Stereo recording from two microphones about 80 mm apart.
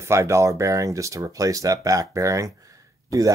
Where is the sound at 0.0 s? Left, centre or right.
Right.